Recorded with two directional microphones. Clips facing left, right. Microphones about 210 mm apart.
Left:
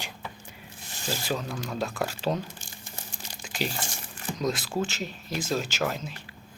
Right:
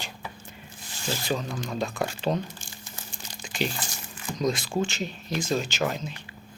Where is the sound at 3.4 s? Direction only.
5° left (ahead or behind).